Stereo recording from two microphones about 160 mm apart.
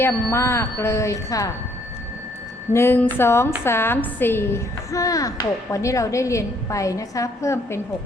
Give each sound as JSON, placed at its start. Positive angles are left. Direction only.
{"t": 0.0, "sound": "speech", "side_deg": 15}
{"t": 2.7, "sound": "a woman's voice", "side_deg": 15}